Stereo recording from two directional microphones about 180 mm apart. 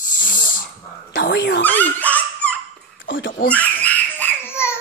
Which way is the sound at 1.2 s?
75° left (ahead or behind).